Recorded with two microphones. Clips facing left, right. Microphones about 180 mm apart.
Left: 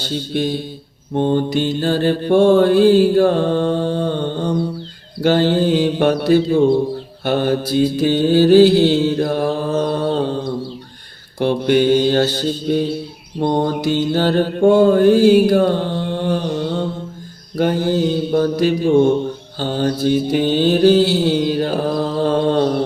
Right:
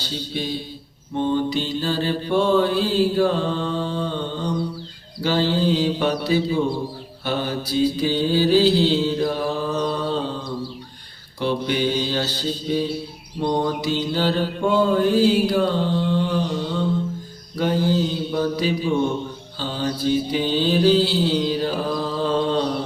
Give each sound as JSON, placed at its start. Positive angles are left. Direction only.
{"t": 0.0, "sound": "mantra", "side_deg": 55}